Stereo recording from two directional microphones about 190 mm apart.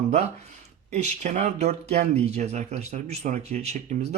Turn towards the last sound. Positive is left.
turn(degrees=-35)  # may be behind; listen again after turning